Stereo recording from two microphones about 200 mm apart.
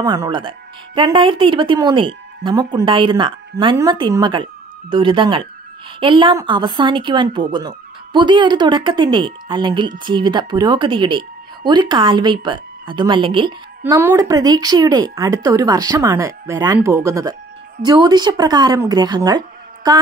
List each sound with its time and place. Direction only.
0.0 s a woman's voice: 20° right (ahead or behind)
13.9 s a woman's voice: 15° right (ahead or behind)